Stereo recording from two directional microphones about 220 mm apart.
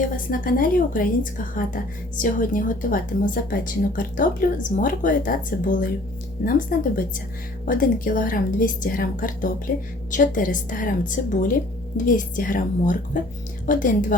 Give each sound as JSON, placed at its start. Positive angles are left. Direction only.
{"t": 0.3, "sound": "speech", "side_deg": 40}